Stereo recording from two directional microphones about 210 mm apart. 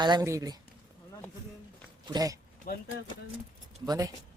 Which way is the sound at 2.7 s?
40° left (ahead or behind).